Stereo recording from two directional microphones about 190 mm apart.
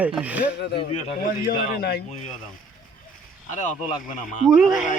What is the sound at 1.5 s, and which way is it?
Speech, 55° left (ahead or behind).